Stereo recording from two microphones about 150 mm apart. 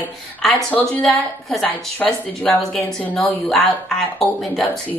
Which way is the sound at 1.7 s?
10° left (ahead or behind).